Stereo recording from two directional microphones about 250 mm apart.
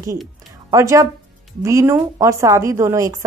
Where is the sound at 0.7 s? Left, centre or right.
Centre.